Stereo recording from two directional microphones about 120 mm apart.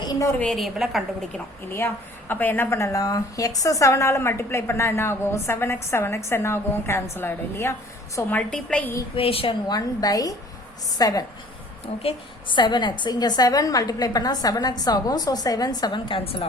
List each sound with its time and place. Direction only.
0.0 s a sound: 25° left (ahead or behind)
0.3 s a woman's voice: 5° left (ahead or behind)
1.7 s a woman's voice: 15° left (ahead or behind)
8.4 s a woman's voice: 10° left (ahead or behind)
9.1 s a woman's voice: 50° left (ahead or behind)
9.6 s a woman's voice: 30° left (ahead or behind); by 16.5 s 55° left (ahead or behind)